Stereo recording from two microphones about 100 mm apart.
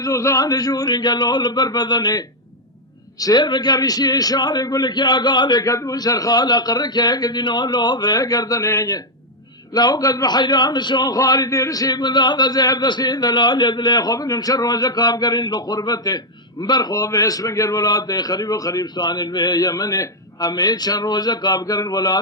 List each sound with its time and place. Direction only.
0.0 s a man's voice: 30° left (ahead or behind)